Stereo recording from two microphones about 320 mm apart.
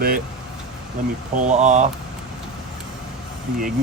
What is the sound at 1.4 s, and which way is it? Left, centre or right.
Speech, right.